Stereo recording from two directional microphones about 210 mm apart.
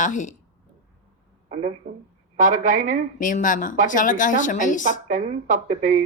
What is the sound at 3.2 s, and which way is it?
A woman's voice, 40° left (ahead or behind).